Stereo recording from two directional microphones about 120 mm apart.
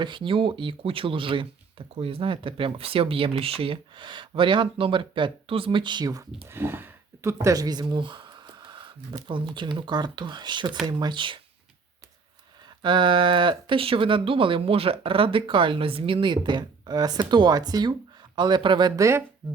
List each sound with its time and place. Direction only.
0.0 s speech: 45° right (ahead or behind)
6.5 s speech: 20° right (ahead or behind); by 11.3 s 40° right (ahead or behind)
12.8 s speech: 40° right (ahead or behind)
19.0 s speech: 25° right (ahead or behind)